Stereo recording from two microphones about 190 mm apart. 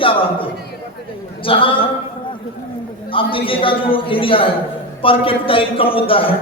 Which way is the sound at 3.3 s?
25° left (ahead or behind).